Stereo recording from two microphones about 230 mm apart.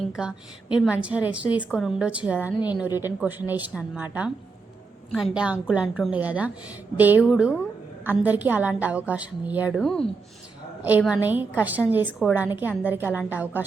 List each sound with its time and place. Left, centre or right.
0.2 s a woman's voice: centre
2.5 s a woman's voice: centre
3.0 s a woman's voice: centre